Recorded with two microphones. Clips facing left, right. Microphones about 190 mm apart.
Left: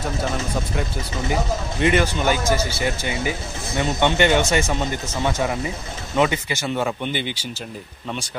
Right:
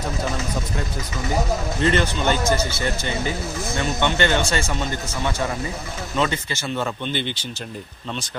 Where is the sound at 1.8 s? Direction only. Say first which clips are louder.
Left 2 dB; 10° left (ahead or behind).